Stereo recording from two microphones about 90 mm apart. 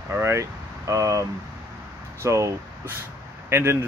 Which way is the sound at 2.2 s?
35° right (ahead or behind).